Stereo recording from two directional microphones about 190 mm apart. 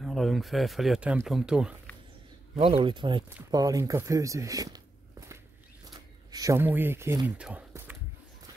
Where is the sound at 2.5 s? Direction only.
30° right (ahead or behind).